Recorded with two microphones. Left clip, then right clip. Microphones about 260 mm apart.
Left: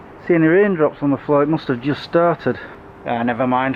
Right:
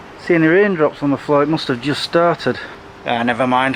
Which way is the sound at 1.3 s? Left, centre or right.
Centre.